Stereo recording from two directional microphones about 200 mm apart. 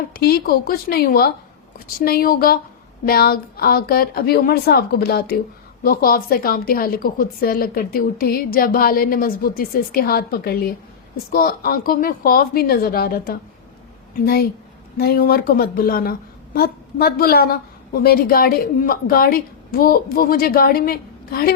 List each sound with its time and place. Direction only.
0.1 s a woman's voice: 50° left (ahead or behind)
14.9 s a woman's voice: 50° left (ahead or behind)